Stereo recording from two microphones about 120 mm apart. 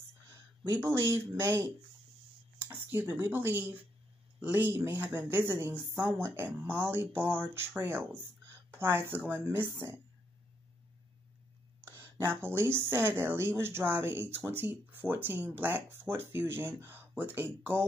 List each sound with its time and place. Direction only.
0.3 s speech: 25° right (ahead or behind)
11.9 s speech: 20° right (ahead or behind)